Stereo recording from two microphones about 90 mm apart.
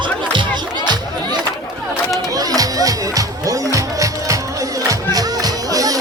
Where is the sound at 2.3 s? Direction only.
40° right (ahead or behind).